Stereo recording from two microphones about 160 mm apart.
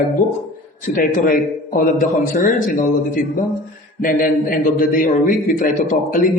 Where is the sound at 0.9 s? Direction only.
55° left (ahead or behind).